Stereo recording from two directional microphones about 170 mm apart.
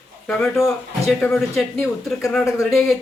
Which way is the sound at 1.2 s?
10° left (ahead or behind).